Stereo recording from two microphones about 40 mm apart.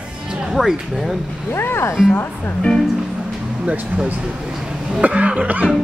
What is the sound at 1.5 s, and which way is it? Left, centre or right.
Speech, left.